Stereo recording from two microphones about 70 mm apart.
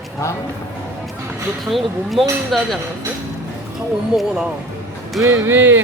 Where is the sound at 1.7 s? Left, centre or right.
Centre.